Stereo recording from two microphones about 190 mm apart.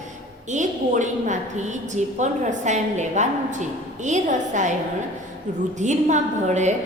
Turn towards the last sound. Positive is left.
turn(degrees=-40)  # may be behind; listen again after turning